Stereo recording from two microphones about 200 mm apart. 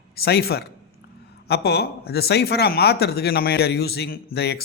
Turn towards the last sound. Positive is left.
turn(degrees=55)  # may be behind; listen again after turning